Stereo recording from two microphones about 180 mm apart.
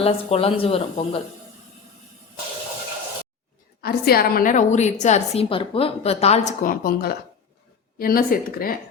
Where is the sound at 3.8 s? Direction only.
60° left (ahead or behind).